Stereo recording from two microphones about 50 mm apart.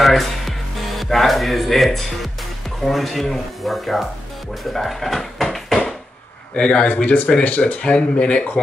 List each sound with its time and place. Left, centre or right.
0.0 s music: centre
2.8 s speech: centre
6.5 s speech: left